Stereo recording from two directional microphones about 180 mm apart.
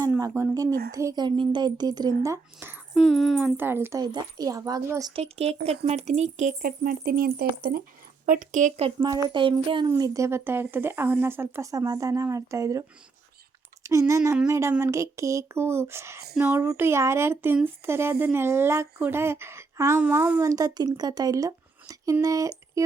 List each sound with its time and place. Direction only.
0.1 s speech: 15° right (ahead or behind)
2.9 s speech: centre (ahead or behind)
4.0 s speech: 25° right (ahead or behind)
5.1 s speech: 35° right (ahead or behind); by 7.9 s 55° right (ahead or behind)
8.3 s speech: 45° right (ahead or behind)
9.0 s speech: 20° right (ahead or behind)
14.1 s speech: 15° right (ahead or behind)